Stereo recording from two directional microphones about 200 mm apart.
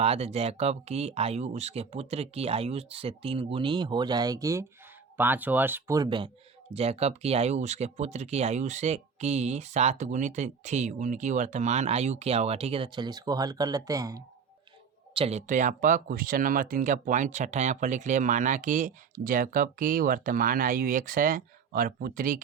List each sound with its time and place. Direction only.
0.0 s speech: 30° right (ahead or behind)
15.1 s speech: 30° right (ahead or behind)